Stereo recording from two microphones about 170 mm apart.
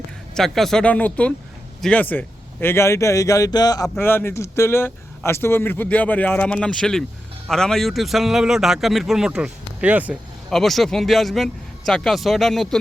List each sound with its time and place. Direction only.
0.3 s a man's voice: centre (ahead or behind); by 3.8 s 25° left (ahead or behind)
3.8 s a man's voice: 10° left (ahead or behind)